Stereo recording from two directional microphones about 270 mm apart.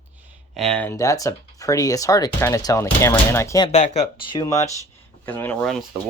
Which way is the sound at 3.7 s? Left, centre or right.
Left.